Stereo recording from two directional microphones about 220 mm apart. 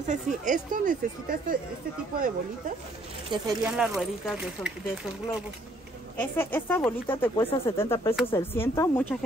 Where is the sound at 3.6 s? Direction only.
5° right (ahead or behind).